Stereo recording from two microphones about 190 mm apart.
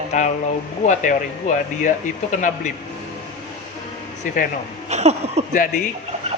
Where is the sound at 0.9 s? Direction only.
40° left (ahead or behind).